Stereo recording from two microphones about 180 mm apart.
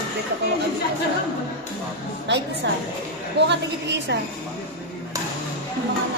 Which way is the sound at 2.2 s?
75° right (ahead or behind).